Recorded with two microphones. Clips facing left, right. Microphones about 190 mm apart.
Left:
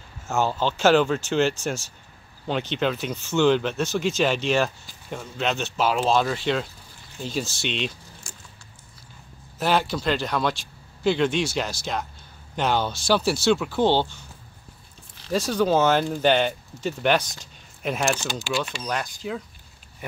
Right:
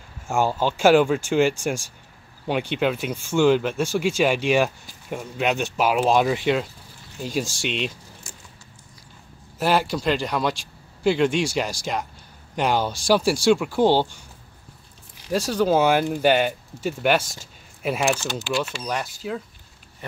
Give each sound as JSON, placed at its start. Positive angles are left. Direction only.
{"t": 0.3, "sound": "speech", "side_deg": -10}
{"t": 8.3, "sound": "vehicle", "side_deg": -20}
{"t": 9.6, "sound": "speech", "side_deg": -10}
{"t": 15.2, "sound": "speech", "side_deg": -10}
{"t": 18.1, "sound": "speech", "side_deg": 5}